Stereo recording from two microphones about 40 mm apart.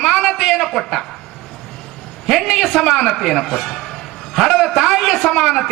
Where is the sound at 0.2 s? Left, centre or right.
Centre.